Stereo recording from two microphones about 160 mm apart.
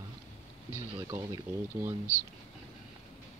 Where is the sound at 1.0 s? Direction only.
20° right (ahead or behind).